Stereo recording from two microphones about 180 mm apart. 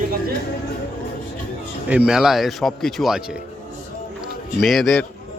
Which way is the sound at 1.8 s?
5° right (ahead or behind).